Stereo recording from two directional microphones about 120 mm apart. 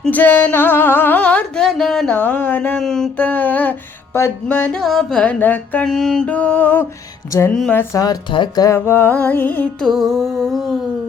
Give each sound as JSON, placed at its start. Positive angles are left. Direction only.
{"t": 0.0, "sound": "music", "side_deg": 15}
{"t": 2.1, "sound": "music", "side_deg": 15}
{"t": 5.9, "sound": "music", "side_deg": 5}
{"t": 7.9, "sound": "speech", "side_deg": 30}
{"t": 8.3, "sound": "music", "side_deg": 35}
{"t": 9.8, "sound": "music", "side_deg": 0}